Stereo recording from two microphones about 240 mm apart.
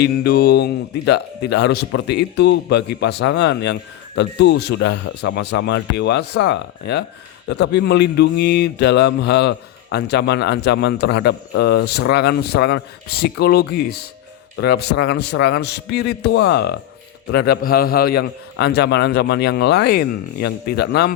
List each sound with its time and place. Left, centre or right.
0.0 s speech: left